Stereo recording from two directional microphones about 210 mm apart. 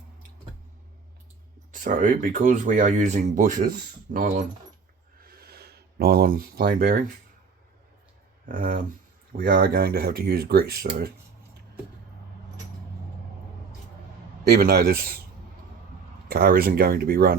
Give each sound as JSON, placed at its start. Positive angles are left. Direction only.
{"t": 1.7, "sound": "speech", "side_deg": -40}
{"t": 5.3, "sound": "a sound", "side_deg": -45}
{"t": 8.4, "sound": "speech", "side_deg": -40}
{"t": 14.4, "sound": "speech", "side_deg": -45}
{"t": 16.3, "sound": "speech", "side_deg": -45}